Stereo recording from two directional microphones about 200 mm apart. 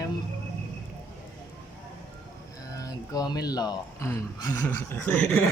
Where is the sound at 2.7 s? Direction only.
15° left (ahead or behind).